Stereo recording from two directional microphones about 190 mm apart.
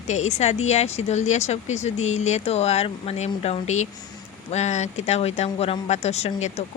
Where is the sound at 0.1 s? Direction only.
35° left (ahead or behind).